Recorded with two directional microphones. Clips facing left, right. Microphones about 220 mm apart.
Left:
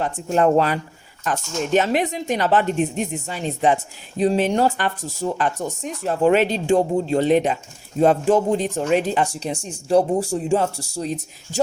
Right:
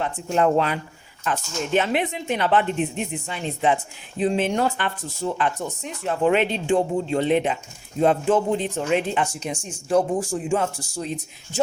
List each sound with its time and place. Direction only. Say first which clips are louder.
0.0 s speech: left 2 dB; 40° left (ahead or behind)